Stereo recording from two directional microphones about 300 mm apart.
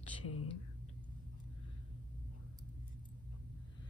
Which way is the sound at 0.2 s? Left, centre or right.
Left.